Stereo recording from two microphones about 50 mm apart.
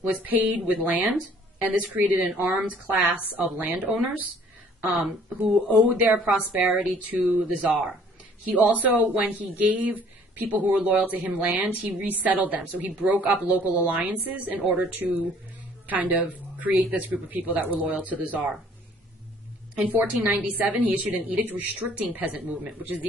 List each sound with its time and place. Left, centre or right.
0.0 s speech: right
5.7 s speech: right
19.8 s speech: right